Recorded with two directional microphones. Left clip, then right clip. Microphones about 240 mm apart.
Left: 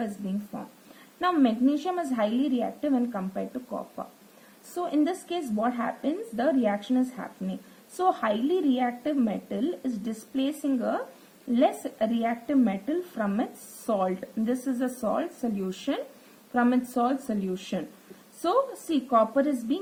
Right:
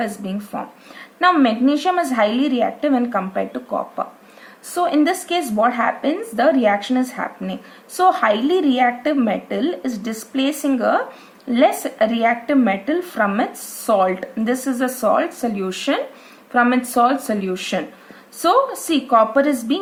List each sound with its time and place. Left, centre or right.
0.0 s speech: right